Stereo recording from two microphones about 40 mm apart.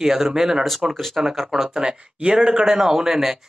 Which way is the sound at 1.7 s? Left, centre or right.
Centre.